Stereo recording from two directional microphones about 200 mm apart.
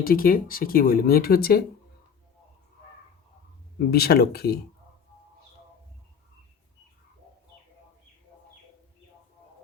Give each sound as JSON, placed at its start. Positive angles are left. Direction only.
{"t": 0.0, "sound": "speech", "side_deg": 45}
{"t": 3.8, "sound": "speech", "side_deg": 50}